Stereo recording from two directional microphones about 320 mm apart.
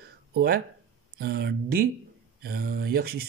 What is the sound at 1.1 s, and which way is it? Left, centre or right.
A man's voice, right.